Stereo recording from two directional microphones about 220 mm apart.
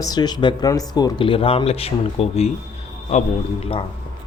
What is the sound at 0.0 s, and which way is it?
Speech, 20° left (ahead or behind).